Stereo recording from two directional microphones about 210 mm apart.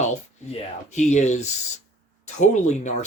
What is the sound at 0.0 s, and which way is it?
Speech, 35° left (ahead or behind).